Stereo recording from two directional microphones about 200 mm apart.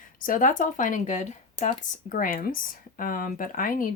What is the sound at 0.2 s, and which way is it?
Speech, 40° left (ahead or behind).